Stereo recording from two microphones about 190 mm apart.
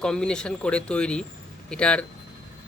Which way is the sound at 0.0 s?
5° left (ahead or behind).